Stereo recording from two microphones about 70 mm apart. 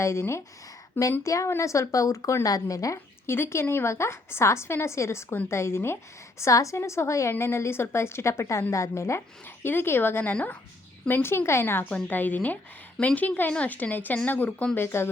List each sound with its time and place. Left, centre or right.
0.0 s a woman's voice: left
3.2 s a woman's voice: left
6.4 s a woman's voice: left
9.6 s a woman's voice: left
11.9 s a woman's voice: centre
14.8 s a woman's voice: left